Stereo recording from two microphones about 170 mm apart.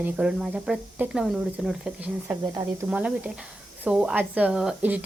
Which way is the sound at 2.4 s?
25° right (ahead or behind).